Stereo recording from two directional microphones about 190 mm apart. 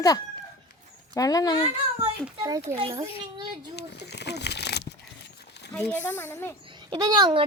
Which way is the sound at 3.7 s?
60° left (ahead or behind).